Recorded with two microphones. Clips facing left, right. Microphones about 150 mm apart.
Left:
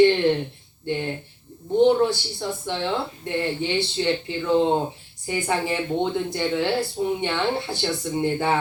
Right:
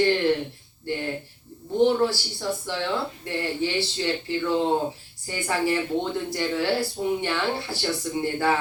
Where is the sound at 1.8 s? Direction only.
20° left (ahead or behind).